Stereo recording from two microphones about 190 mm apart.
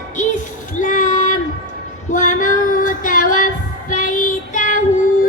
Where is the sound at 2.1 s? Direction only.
40° left (ahead or behind).